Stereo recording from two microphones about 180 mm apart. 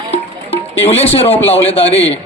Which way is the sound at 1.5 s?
35° left (ahead or behind).